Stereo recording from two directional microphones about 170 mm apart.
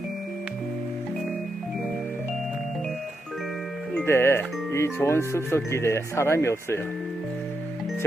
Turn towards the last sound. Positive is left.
turn(degrees=15)  # may be behind; listen again after turning